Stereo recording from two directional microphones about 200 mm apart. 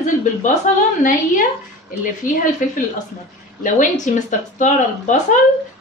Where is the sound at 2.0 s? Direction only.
40° left (ahead or behind).